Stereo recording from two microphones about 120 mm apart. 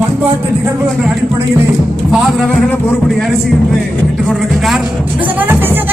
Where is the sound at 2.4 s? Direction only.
5° left (ahead or behind).